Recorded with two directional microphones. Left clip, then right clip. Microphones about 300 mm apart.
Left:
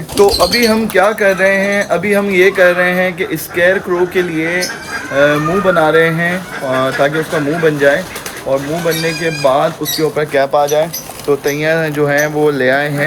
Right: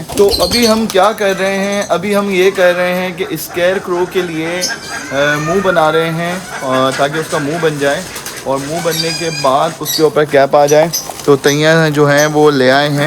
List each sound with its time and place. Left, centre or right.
0.2 s speech: centre
0.5 s speech: centre
9.2 s speech: centre
10.2 s speech: right